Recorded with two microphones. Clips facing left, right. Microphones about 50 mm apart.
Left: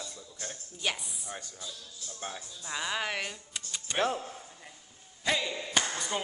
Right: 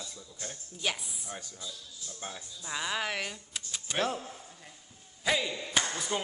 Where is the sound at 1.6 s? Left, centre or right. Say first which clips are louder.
Even; left.